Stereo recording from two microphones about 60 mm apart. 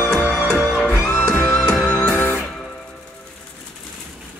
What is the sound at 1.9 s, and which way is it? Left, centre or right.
Music, centre.